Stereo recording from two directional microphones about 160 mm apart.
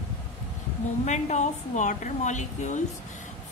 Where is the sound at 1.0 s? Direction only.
45° left (ahead or behind).